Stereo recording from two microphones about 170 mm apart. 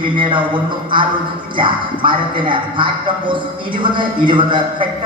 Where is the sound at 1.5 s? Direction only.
30° right (ahead or behind).